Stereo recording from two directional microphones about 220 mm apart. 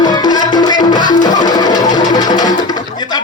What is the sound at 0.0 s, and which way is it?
Music, 20° left (ahead or behind).